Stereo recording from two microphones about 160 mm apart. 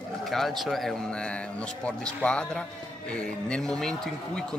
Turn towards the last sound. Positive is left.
turn(degrees=5)  # may be behind; listen again after turning